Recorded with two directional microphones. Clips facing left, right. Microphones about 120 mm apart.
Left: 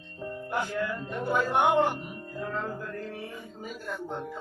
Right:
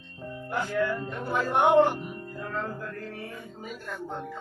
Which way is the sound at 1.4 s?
Centre (ahead or behind).